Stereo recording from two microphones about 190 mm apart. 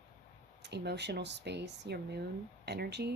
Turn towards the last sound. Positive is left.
turn(degrees=-60)  # may be behind; listen again after turning